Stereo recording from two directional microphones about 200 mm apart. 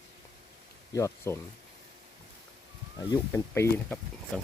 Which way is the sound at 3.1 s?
15° left (ahead or behind).